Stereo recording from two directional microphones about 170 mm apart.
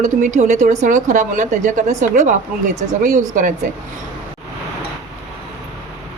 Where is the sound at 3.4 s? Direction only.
50° right (ahead or behind).